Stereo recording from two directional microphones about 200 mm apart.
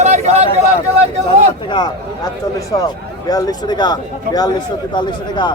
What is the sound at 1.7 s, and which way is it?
A man's voice, 20° left (ahead or behind).